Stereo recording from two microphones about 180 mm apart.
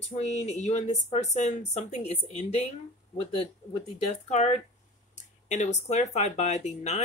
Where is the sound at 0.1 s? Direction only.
40° left (ahead or behind).